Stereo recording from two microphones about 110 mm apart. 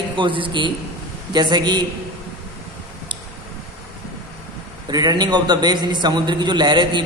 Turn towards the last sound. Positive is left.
turn(degrees=-45)  # may be behind; listen again after turning